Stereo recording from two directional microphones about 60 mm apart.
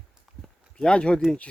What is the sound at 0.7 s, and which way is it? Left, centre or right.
Speech, centre.